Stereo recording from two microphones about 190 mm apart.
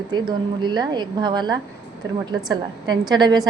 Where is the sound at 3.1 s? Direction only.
20° right (ahead or behind).